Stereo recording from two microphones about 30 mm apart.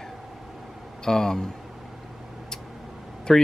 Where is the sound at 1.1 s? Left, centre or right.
Centre.